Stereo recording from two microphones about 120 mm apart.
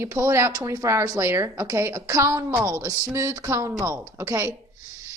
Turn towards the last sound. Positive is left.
turn(degrees=-25)  # may be behind; listen again after turning